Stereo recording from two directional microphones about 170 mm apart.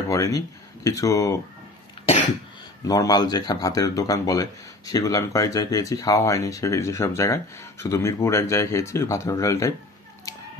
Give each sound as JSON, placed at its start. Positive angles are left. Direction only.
{"t": 0.1, "sound": "speech", "side_deg": 20}
{"t": 2.9, "sound": "speech", "side_deg": 20}